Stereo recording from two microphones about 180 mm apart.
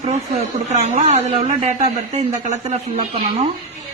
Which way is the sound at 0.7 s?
40° right (ahead or behind).